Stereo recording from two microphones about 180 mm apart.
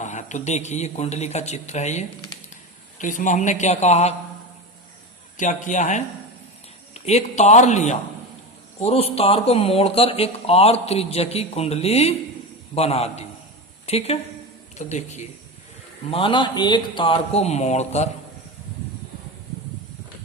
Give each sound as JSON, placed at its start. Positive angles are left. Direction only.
{"t": 0.0, "sound": "speech", "side_deg": 40}
{"t": 5.4, "sound": "speech", "side_deg": 45}
{"t": 16.0, "sound": "speech", "side_deg": 30}